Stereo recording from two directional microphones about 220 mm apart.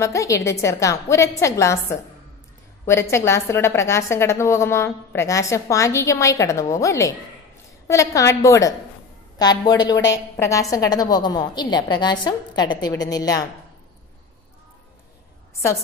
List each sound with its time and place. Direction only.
0.0 s a woman's voice: 15° left (ahead or behind)